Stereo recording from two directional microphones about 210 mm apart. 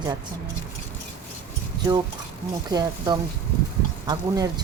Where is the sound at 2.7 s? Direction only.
20° right (ahead or behind).